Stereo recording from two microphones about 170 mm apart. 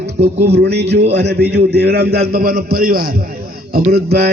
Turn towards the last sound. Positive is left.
turn(degrees=-70)  # may be behind; listen again after turning